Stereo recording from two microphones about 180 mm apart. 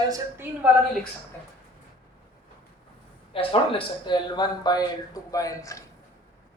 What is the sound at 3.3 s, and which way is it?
Speech, 30° left (ahead or behind).